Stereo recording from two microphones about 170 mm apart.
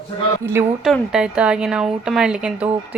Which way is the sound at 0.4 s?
15° right (ahead or behind).